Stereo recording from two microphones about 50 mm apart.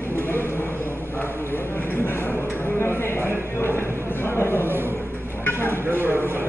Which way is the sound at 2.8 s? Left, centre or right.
Left.